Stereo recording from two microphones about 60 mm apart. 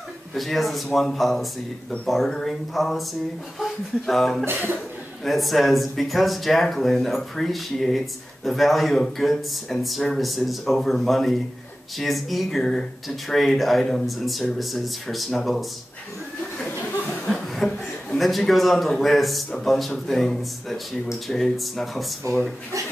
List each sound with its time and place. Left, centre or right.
0.3 s speech: centre
4.5 s speech: right
5.2 s speech: centre
17.3 s a man's voice: centre
22.2 s speech: right